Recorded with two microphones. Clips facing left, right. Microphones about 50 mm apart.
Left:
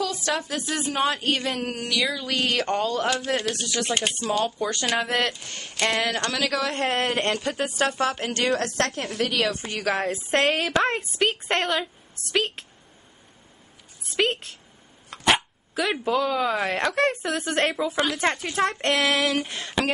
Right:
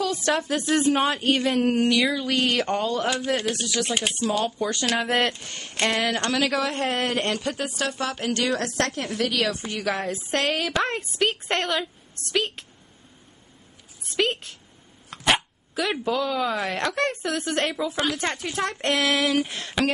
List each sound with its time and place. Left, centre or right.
0.3 s speech: centre
5.4 s speech: centre
5.9 s speech: centre
8.9 s a woman's voice: centre
14.0 s a woman's voice: centre